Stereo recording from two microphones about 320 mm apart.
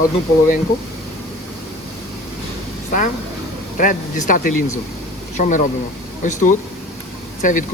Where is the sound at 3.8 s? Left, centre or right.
Left.